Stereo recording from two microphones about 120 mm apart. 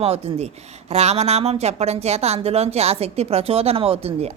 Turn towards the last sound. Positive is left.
turn(degrees=-55)  # may be behind; listen again after turning